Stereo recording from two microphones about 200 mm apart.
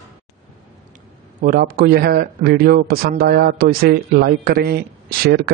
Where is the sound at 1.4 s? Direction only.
45° right (ahead or behind).